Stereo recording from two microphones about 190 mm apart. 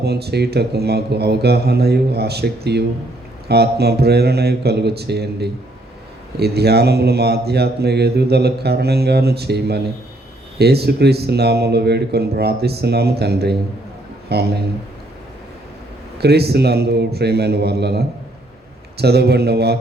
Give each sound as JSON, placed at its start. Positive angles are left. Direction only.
{"t": 0.0, "sound": "speech", "side_deg": -60}
{"t": 16.2, "sound": "speech", "side_deg": -55}